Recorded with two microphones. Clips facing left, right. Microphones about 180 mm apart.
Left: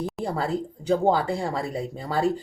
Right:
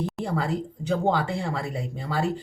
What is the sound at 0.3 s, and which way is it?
Speech, 35° left (ahead or behind).